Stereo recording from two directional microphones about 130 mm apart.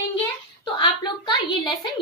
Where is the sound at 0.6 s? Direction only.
35° left (ahead or behind).